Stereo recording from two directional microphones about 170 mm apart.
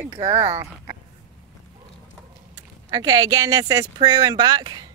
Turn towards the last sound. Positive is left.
turn(degrees=-25)  # may be behind; listen again after turning